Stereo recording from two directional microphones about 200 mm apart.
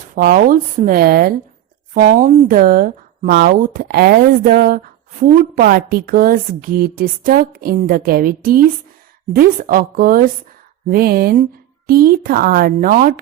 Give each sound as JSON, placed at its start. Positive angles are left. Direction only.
{"t": 0.2, "sound": "a woman's voice", "side_deg": -50}